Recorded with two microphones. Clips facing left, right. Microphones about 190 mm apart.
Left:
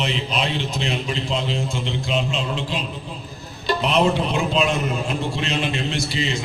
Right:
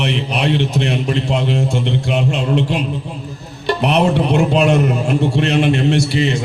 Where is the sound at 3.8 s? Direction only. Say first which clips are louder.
Right 5 dB; 70° right (ahead or behind).